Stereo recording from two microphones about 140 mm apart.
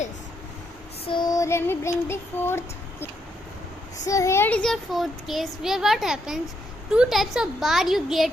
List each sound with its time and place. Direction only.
1.0 s female singing: 35° left (ahead or behind); by 3.1 s 15° left (ahead or behind)
4.0 s a child's voice: 20° left (ahead or behind); by 8.3 s centre (ahead or behind)